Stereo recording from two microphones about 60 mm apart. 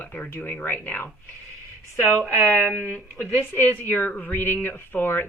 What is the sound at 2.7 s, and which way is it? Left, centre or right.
Speech, right.